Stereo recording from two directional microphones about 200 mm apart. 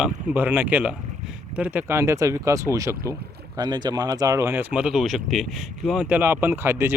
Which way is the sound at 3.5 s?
20° right (ahead or behind).